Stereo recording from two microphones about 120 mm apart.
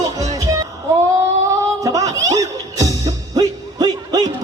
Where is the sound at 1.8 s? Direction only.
30° right (ahead or behind).